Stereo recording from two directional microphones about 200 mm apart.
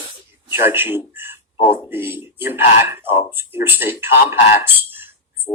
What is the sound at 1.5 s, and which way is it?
Speech, 25° left (ahead or behind).